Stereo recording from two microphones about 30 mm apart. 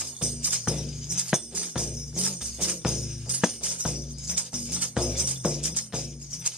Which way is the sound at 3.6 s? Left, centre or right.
Right.